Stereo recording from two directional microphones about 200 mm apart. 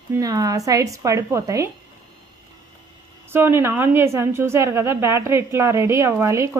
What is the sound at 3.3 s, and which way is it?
A woman's voice, 10° right (ahead or behind).